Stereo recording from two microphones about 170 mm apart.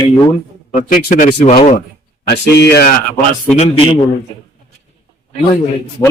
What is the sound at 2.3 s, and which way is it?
Speech, 75° left (ahead or behind).